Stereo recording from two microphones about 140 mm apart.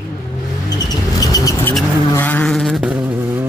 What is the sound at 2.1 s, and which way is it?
Vehicle, 10° left (ahead or behind).